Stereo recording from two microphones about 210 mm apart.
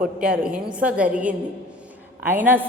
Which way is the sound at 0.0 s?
5° right (ahead or behind).